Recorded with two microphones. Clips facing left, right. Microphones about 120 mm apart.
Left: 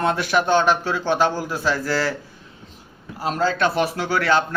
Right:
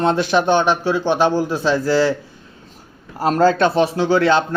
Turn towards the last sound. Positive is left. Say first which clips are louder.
# right 5 dB
turn(degrees=-25)  # may be behind; listen again after turning